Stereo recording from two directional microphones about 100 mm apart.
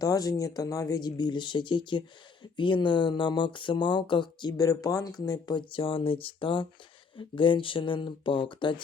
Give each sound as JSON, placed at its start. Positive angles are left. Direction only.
{"t": 0.0, "sound": "speech", "side_deg": 40}